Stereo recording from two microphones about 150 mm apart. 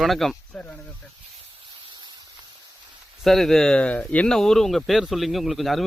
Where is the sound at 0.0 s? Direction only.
Centre (ahead or behind).